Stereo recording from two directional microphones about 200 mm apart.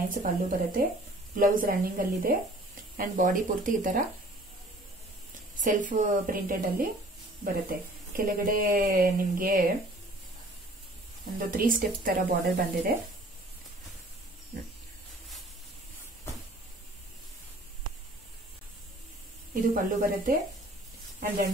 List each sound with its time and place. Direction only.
0.1 s speech: 45° right (ahead or behind)
5.6 s speech: 40° right (ahead or behind)
11.3 s speech: 45° right (ahead or behind)
19.5 s speech: 45° right (ahead or behind)